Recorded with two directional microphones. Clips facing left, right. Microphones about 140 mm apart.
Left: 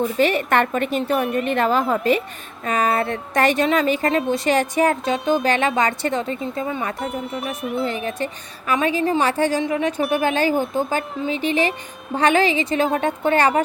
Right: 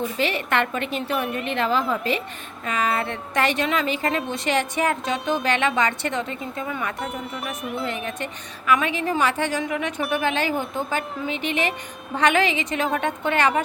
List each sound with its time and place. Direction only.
0.2 s a woman's voice: 45° left (ahead or behind); by 6.9 s 30° left (ahead or behind)
7.0 s speech: centre (ahead or behind)
7.9 s a woman's voice: 35° left (ahead or behind)